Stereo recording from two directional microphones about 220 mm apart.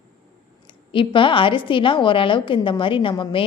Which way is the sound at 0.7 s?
25° left (ahead or behind).